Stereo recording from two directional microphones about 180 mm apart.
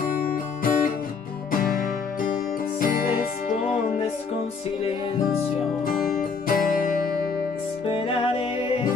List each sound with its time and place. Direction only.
0.3 s music: 50° left (ahead or behind)
2.8 s music: 50° left (ahead or behind)
5.9 s music: 50° left (ahead or behind)
7.9 s music: 30° left (ahead or behind)